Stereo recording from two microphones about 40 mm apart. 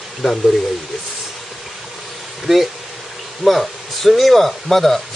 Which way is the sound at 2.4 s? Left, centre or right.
Centre.